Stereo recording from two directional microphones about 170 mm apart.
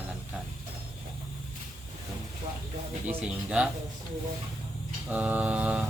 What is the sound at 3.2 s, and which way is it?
Speech, 5° right (ahead or behind).